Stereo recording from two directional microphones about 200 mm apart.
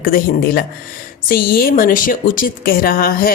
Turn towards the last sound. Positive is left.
turn(degrees=45)  # may be behind; listen again after turning